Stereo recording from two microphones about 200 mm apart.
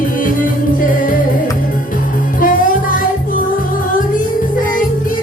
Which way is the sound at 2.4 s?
40° left (ahead or behind).